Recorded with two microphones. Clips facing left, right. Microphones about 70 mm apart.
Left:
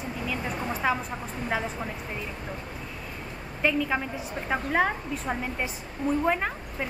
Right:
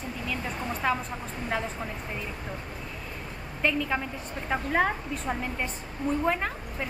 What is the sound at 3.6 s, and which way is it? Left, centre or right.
A woman's voice, centre.